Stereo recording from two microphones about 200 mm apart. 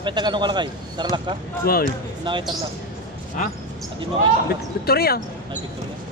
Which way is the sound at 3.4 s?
40° left (ahead or behind).